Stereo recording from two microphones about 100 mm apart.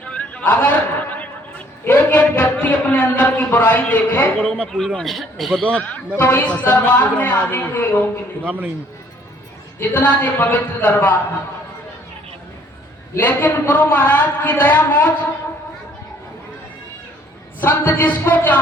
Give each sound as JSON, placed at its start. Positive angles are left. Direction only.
{"t": 0.0, "sound": "a sound", "side_deg": 10}
{"t": 3.5, "sound": "a woman's voice", "side_deg": 20}
{"t": 5.6, "sound": "a woman's voice", "side_deg": 15}
{"t": 8.4, "sound": "a man's voice", "side_deg": -15}
{"t": 9.7, "sound": "a woman's voice", "side_deg": 15}
{"t": 13.1, "sound": "a woman's voice", "side_deg": 15}
{"t": 17.6, "sound": "a woman's voice", "side_deg": 20}